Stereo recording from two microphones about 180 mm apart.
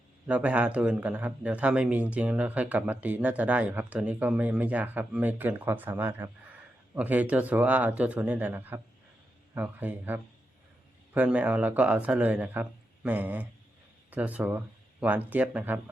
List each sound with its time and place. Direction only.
0.3 s speech: 5° right (ahead or behind)